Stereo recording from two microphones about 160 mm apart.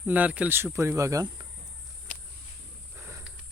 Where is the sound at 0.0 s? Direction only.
10° right (ahead or behind).